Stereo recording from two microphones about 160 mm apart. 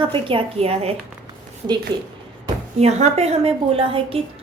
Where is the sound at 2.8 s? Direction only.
45° right (ahead or behind).